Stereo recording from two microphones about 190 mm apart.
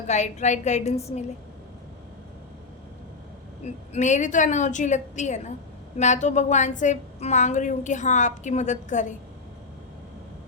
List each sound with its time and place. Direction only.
0.1 s a woman's voice: 40° left (ahead or behind)
3.6 s a woman's voice: 35° left (ahead or behind)